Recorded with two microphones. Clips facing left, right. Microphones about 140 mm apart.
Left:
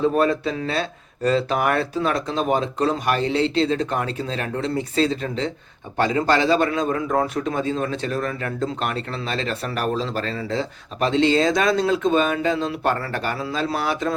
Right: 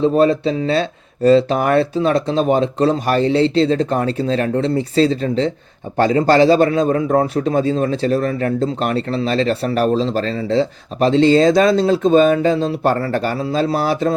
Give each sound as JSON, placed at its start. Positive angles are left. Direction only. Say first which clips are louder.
{"t": 0.0, "sound": "a man's voice", "louder": "right 5 dB", "side_deg": -25}